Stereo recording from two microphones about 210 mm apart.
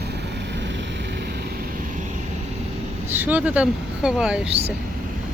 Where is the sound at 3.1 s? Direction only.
10° right (ahead or behind).